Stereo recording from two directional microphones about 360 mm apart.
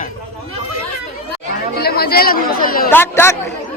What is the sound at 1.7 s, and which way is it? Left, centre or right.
Speech, left.